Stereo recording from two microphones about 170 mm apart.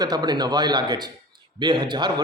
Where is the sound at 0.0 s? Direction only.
25° right (ahead or behind).